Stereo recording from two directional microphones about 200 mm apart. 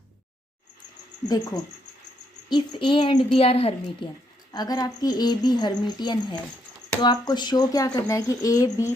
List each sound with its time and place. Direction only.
1.3 s speech: 20° left (ahead or behind)